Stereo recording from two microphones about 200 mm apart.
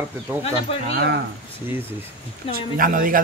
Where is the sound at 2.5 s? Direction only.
45° right (ahead or behind).